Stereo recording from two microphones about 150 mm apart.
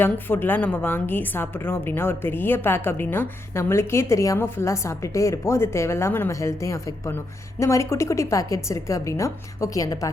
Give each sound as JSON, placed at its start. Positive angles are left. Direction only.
{"t": 0.0, "sound": "a woman's voice", "side_deg": 15}